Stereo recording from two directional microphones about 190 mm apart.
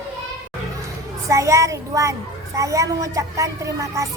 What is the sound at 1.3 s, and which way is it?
Speech, 15° right (ahead or behind).